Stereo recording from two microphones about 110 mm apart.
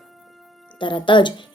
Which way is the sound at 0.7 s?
45° left (ahead or behind).